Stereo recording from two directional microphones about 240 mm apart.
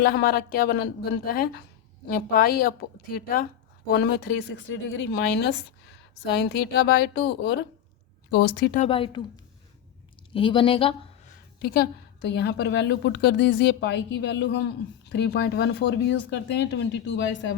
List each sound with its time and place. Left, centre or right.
0.0 s a woman's voice: left
8.8 s speech: left
11.6 s a woman's voice: left